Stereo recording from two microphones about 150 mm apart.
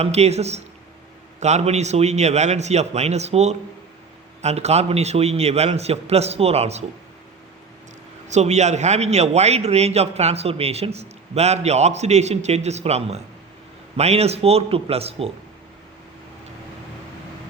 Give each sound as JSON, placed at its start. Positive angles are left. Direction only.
{"t": 0.0, "sound": "a man's voice", "side_deg": -45}
{"t": 8.3, "sound": "a man's voice", "side_deg": -50}